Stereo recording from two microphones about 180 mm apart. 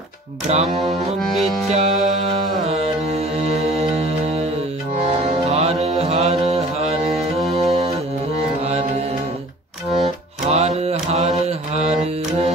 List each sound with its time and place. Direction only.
0.5 s music: 35° right (ahead or behind)
2.7 s mantra: 35° right (ahead or behind)
5.2 s music: 35° right (ahead or behind)
10.5 s mantra: 35° right (ahead or behind)